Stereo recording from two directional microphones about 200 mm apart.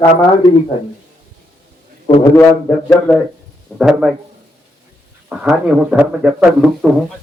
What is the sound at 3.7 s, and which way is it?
Mantra, 5° right (ahead or behind).